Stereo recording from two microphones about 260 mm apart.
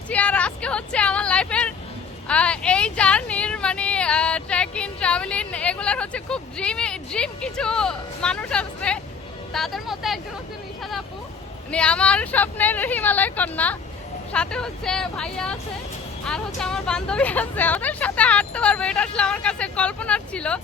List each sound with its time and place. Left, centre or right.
0.1 s vehicle: centre
2.2 s a sound: centre
9.5 s speech: centre
11.7 s speech: centre